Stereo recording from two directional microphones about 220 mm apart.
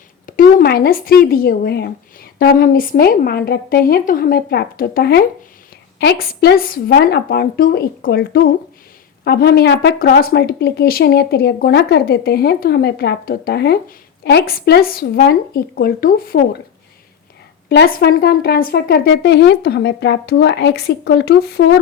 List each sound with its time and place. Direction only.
0.3 s speech: 40° left (ahead or behind)
17.7 s speech: 45° left (ahead or behind)